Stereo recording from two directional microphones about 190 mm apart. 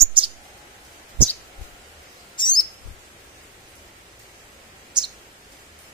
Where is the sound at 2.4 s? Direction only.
25° left (ahead or behind).